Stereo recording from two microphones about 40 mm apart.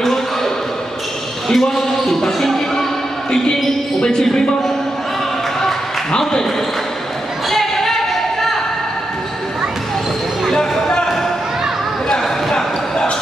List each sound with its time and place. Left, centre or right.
1.5 s basketball bounce: centre
4.2 s speech: centre
5.6 s a sound: centre
7.4 s a sound: centre
10.5 s basketball bounce: centre
12.1 s basketball bounce: centre